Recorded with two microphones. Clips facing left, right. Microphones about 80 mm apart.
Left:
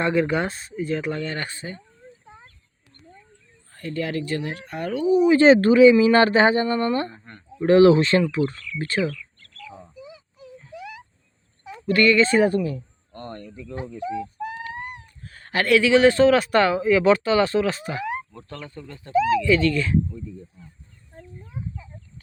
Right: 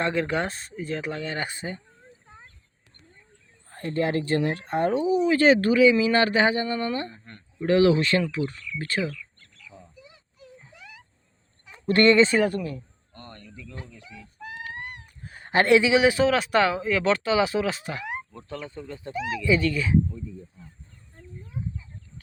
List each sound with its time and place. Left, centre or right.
0.0 s speech: centre
1.5 s speech: right
3.7 s speech: right
5.4 s speech: left
11.7 s speech: right
12.4 s speech: centre
13.1 s speech: left
15.0 s cat: centre
15.5 s speech: right
15.9 s speech: centre
18.3 s speech: centre